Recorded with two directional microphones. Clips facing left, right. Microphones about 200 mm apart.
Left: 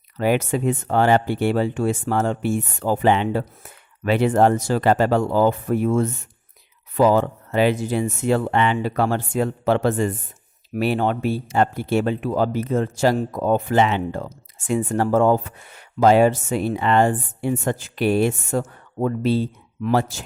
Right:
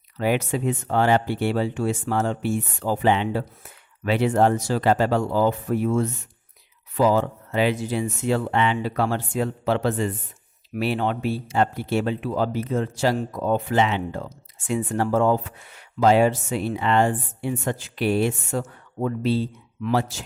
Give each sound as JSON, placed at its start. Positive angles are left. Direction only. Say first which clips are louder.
{"t": 0.2, "sound": "speech", "louder": "left 3 dB", "side_deg": 50}